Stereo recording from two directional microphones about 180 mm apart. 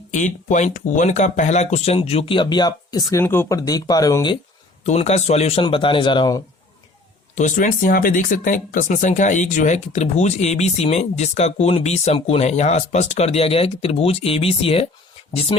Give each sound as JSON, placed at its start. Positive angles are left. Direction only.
{"t": 0.1, "sound": "speech", "side_deg": 45}
{"t": 4.8, "sound": "speech", "side_deg": 40}
{"t": 7.3, "sound": "speech", "side_deg": 45}